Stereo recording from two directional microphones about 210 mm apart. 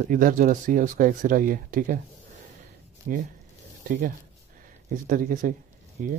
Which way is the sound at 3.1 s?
40° right (ahead or behind).